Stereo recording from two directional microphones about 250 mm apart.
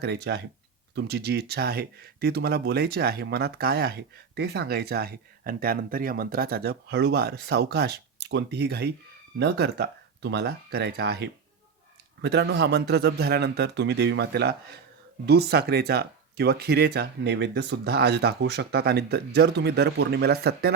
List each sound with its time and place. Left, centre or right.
0.0 s speech: right